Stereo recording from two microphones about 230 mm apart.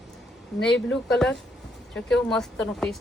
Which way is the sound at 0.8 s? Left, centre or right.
Centre.